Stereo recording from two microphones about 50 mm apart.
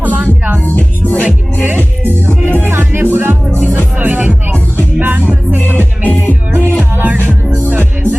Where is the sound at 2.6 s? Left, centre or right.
Right.